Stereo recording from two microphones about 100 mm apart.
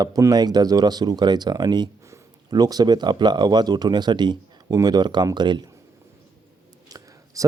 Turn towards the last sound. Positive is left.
turn(degrees=-35)  # may be behind; listen again after turning